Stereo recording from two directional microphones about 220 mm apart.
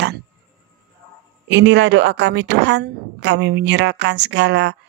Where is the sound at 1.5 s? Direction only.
55° right (ahead or behind).